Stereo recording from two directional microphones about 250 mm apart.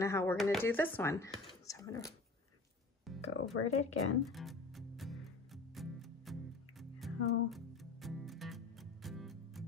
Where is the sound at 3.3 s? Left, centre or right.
Left.